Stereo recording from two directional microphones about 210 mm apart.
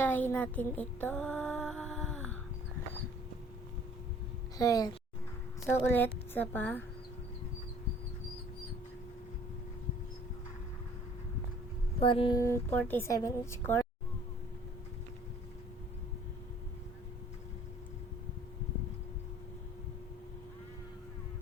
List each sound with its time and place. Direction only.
0.0 s music: 10° left (ahead or behind)
4.5 s a woman's voice: 15° left (ahead or behind)
11.9 s speech: 25° left (ahead or behind)
12.4 s speech: 10° left (ahead or behind)